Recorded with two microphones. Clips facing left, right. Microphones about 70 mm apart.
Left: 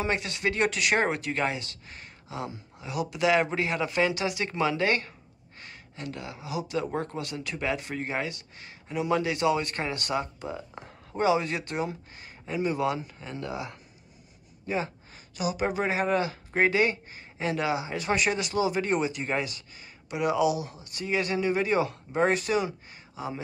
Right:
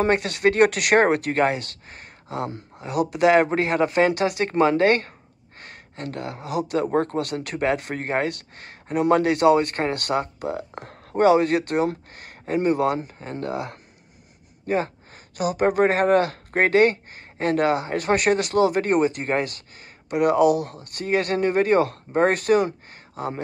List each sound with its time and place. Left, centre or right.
0.0 s speech: right